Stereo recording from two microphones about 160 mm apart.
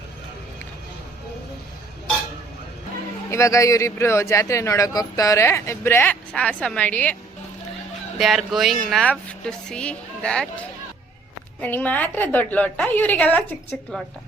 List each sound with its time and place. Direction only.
3.2 s a man's voice: 20° left (ahead or behind)
8.2 s a woman's voice: centre (ahead or behind)